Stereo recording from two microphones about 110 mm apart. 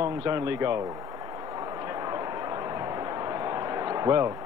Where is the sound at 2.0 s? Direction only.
35° right (ahead or behind).